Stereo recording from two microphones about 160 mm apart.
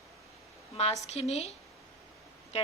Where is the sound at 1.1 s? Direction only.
45° left (ahead or behind).